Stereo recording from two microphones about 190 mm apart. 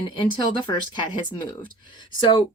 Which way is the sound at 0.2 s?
25° left (ahead or behind).